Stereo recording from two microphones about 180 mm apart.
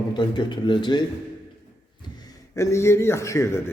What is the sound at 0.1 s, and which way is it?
A man's voice, 25° left (ahead or behind).